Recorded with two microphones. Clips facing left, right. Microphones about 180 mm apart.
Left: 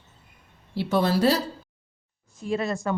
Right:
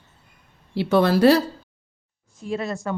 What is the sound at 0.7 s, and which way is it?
Speech, 70° right (ahead or behind).